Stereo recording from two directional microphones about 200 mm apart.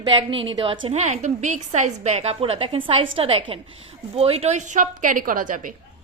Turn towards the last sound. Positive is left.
turn(degrees=-40)  # may be behind; listen again after turning